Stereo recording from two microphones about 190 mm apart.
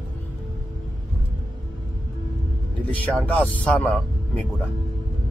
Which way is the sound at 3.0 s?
5° left (ahead or behind).